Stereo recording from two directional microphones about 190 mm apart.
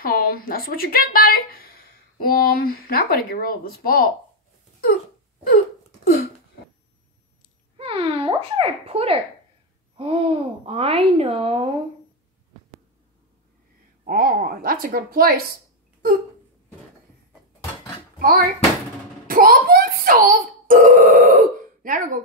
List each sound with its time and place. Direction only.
0.0 s a woman's voice: 50° left (ahead or behind)
5.5 s hiccup: 55° left (ahead or behind)
7.7 s a sound: 30° right (ahead or behind)
9.9 s babbling: 30° right (ahead or behind)
14.0 s a sound: 50° right (ahead or behind)
19.2 s burping: 50° right (ahead or behind)